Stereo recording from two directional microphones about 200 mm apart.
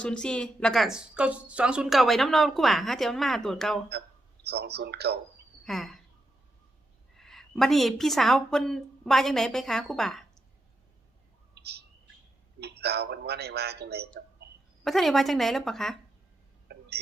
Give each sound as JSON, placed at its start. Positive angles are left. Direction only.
{"t": 0.0, "sound": "a woman's voice", "side_deg": 5}
{"t": 4.4, "sound": "a man's voice", "side_deg": -55}
{"t": 5.6, "sound": "a woman's voice", "side_deg": 0}
{"t": 7.2, "sound": "a woman's voice", "side_deg": 0}
{"t": 11.5, "sound": "bird", "side_deg": -55}
{"t": 12.8, "sound": "a man's voice", "side_deg": -55}
{"t": 14.8, "sound": "a woman's voice", "side_deg": 0}
{"t": 16.7, "sound": "a sound", "side_deg": -55}